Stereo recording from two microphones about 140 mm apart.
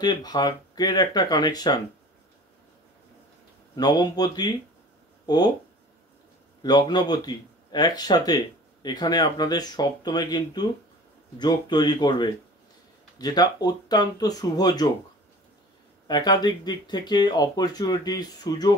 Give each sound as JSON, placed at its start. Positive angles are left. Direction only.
{"t": 0.0, "sound": "speech", "side_deg": 30}
{"t": 3.7, "sound": "speech", "side_deg": 30}
{"t": 6.6, "sound": "speech", "side_deg": 30}
{"t": 16.1, "sound": "speech", "side_deg": 30}